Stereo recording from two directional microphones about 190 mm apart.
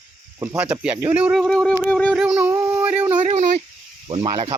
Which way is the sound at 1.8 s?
5° left (ahead or behind).